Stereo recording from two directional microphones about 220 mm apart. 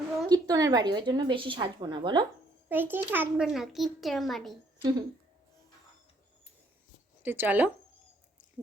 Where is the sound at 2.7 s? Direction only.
10° right (ahead or behind).